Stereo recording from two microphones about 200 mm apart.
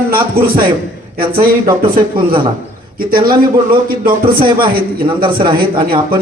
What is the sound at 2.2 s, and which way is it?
Speech, 25° right (ahead or behind).